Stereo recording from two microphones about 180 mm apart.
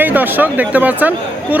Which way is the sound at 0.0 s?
10° right (ahead or behind).